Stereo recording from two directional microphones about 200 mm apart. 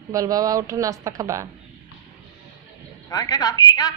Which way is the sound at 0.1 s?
15° right (ahead or behind).